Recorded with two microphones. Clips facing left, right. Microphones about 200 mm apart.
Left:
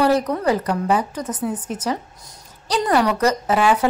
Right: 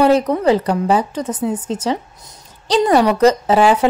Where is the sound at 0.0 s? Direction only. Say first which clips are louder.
Right 5 dB; 25° right (ahead or behind).